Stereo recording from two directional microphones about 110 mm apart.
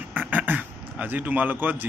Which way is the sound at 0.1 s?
15° right (ahead or behind).